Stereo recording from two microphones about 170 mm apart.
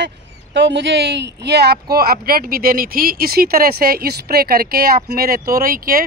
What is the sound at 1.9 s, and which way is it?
Speech, 65° right (ahead or behind).